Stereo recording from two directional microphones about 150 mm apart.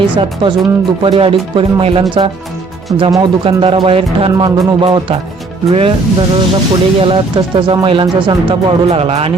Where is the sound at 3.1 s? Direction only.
35° right (ahead or behind).